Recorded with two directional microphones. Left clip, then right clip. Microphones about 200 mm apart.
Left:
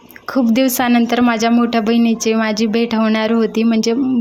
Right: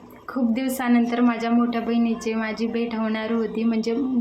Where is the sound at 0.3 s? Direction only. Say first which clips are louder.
Left 10 dB; 40° left (ahead or behind).